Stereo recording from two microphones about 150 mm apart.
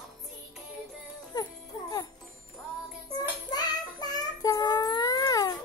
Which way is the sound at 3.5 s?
25° left (ahead or behind).